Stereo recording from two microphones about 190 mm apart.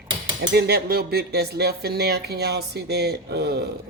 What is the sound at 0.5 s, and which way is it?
Speech, 55° right (ahead or behind).